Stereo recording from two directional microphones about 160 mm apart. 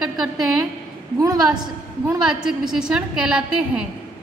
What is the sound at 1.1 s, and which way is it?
A woman's voice, 25° right (ahead or behind).